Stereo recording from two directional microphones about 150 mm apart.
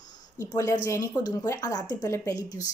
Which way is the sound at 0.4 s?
20° left (ahead or behind).